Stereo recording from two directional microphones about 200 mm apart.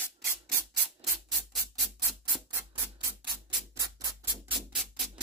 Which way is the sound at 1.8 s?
Centre (ahead or behind).